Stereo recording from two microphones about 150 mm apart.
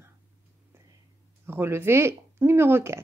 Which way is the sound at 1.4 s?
15° right (ahead or behind).